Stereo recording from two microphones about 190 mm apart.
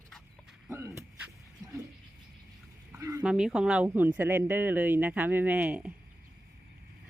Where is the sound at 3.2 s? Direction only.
5° right (ahead or behind).